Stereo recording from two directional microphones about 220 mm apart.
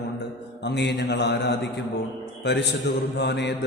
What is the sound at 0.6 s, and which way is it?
A man's voice, 50° left (ahead or behind).